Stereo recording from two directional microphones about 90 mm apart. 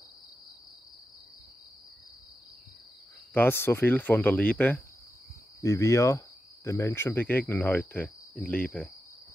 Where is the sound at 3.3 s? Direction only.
25° left (ahead or behind).